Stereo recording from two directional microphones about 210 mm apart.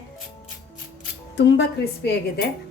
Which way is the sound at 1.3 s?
55° left (ahead or behind).